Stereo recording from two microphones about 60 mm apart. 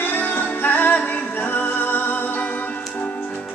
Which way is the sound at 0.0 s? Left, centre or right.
Left.